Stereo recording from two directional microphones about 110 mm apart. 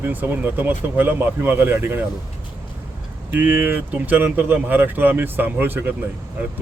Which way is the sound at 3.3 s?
15° right (ahead or behind).